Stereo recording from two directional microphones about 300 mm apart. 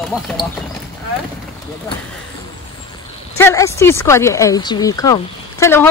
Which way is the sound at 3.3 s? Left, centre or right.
Centre.